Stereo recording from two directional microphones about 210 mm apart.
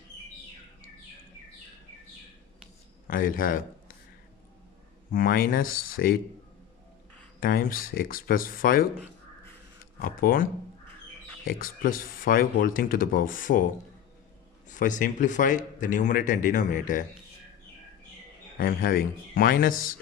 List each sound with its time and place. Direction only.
3.1 s speech: 40° left (ahead or behind)
5.1 s speech: 45° left (ahead or behind)
7.3 s speech: 45° left (ahead or behind)
10.0 s speech: 40° left (ahead or behind)
14.7 s speech: 35° left (ahead or behind)
18.5 s speech: 40° left (ahead or behind)